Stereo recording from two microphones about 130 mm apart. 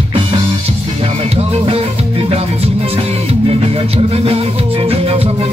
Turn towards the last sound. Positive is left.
turn(degrees=-50)  # may be behind; listen again after turning